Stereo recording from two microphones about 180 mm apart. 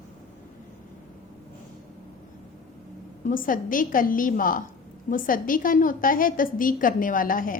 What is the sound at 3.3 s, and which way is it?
A woman's voice, 50° left (ahead or behind).